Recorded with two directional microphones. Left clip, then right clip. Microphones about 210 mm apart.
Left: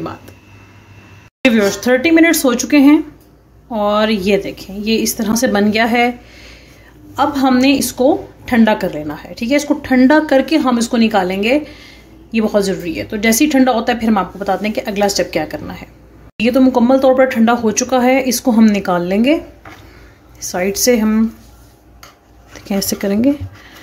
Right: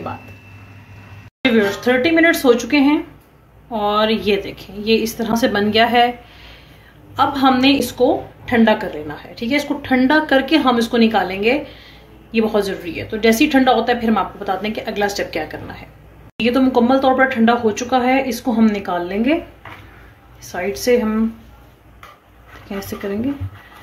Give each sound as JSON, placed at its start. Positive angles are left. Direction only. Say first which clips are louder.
{"t": 1.4, "sound": "a woman's voice", "louder": "left 3 dB", "side_deg": 45}
{"t": 7.2, "sound": "a woman's voice", "louder": "left 1 dB", "side_deg": 40}
{"t": 20.3, "sound": "speech", "louder": "left 5 dB", "side_deg": 45}
{"t": 22.5, "sound": "speech", "louder": "left 8 dB", "side_deg": 45}